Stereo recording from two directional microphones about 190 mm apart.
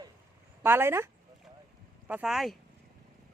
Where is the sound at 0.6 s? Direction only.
10° right (ahead or behind).